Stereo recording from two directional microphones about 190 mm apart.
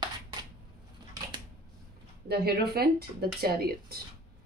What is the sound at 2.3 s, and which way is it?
Speech, 55° right (ahead or behind).